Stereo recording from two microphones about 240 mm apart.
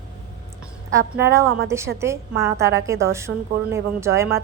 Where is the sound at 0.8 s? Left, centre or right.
Centre.